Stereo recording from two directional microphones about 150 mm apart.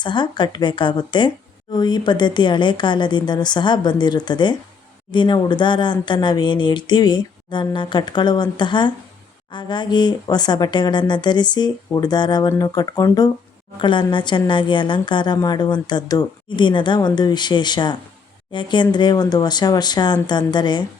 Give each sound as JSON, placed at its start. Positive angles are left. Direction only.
{"t": 0.0, "sound": "a woman's voice", "side_deg": 30}